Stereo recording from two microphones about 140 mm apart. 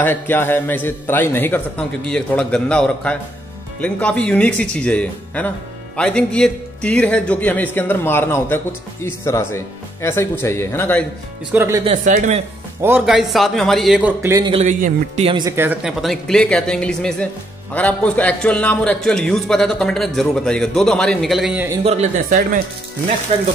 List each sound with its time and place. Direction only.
0.0 s speech: 15° left (ahead or behind)
11.5 s speech: 15° right (ahead or behind)
12.0 s a man's voice: 65° right (ahead or behind)
13.0 s a man's voice: centre (ahead or behind)
14.6 s a man's voice: 55° right (ahead or behind)
15.2 s speech: 35° right (ahead or behind)
15.5 s speech: 15° right (ahead or behind)
15.8 s a man's voice: centre (ahead or behind)
21.8 s speech: 50° right (ahead or behind)
23.3 s speech: 45° right (ahead or behind)